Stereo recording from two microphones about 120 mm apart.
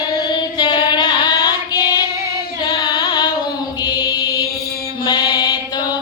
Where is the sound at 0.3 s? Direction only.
40° left (ahead or behind).